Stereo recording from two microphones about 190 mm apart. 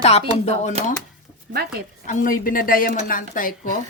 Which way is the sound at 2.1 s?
45° left (ahead or behind).